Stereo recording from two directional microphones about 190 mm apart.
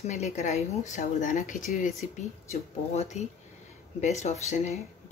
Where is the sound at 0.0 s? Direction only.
35° left (ahead or behind).